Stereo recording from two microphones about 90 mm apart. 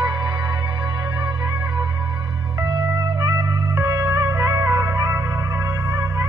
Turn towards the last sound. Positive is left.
turn(degrees=-30)  # may be behind; listen again after turning